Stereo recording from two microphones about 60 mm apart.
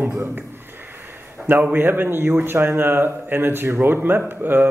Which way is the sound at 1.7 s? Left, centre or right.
Right.